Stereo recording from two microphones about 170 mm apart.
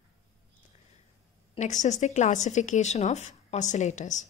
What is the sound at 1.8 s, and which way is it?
A woman's voice, 45° left (ahead or behind).